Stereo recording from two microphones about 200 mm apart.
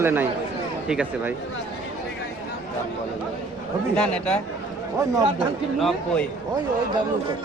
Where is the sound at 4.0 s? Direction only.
5° left (ahead or behind).